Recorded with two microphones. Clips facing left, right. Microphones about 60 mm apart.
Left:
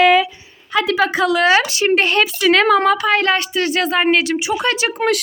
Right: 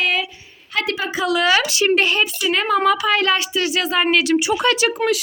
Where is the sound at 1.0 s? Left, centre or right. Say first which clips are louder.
Left 5 dB; left.